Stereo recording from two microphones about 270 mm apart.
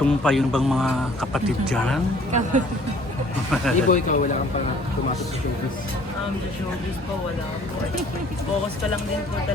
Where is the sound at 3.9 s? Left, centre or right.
Left.